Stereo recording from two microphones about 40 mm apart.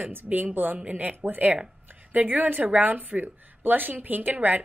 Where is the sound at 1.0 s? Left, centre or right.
Right.